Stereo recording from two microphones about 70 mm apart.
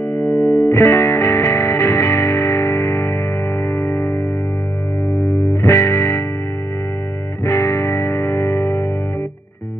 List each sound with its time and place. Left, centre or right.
0.1 s music: centre
0.7 s music: left
5.5 s music: left
7.4 s music: left